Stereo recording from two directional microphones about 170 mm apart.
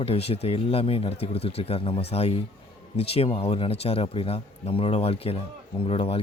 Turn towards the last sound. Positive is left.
turn(degrees=35)  # may be behind; listen again after turning